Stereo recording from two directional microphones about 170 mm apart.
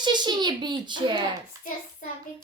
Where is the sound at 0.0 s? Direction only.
25° right (ahead or behind).